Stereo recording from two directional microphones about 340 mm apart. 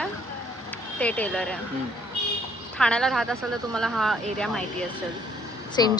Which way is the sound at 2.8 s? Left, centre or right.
Centre.